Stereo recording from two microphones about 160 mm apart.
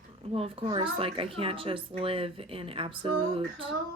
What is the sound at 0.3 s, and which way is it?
Speech, 40° right (ahead or behind).